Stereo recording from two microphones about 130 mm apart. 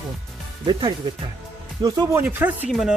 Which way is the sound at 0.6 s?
40° right (ahead or behind).